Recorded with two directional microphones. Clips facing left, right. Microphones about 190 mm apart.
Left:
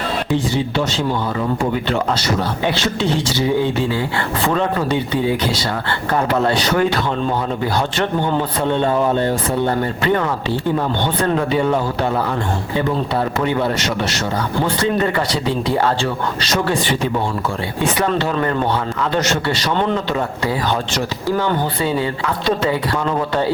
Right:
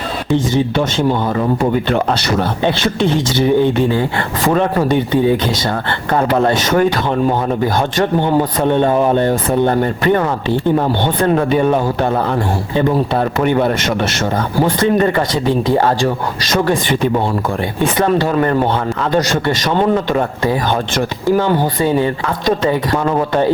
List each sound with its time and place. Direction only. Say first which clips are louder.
1.9 s a sound: right 3 dB; 60° right (ahead or behind)
3.3 s a sound: right 7 dB; 60° right (ahead or behind)
4.4 s speech: right 5 dB; 45° right (ahead or behind)
6.3 s speech: right 4 dB; 50° right (ahead or behind)
16.0 s speech: right 3 dB; 50° right (ahead or behind)
21.8 s speech: right 6 dB; 20° right (ahead or behind)